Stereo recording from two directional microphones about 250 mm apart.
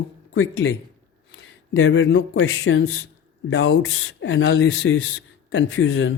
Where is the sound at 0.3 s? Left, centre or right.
Left.